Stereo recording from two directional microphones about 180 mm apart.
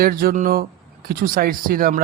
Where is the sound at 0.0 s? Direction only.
55° right (ahead or behind).